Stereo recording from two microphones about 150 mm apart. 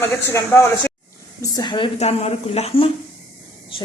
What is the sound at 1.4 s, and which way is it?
A woman's voice, 30° left (ahead or behind).